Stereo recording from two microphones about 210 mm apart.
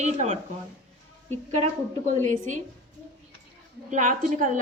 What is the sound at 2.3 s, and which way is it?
Speech, 35° right (ahead or behind).